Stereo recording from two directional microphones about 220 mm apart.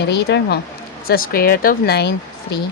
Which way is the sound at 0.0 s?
50° left (ahead or behind).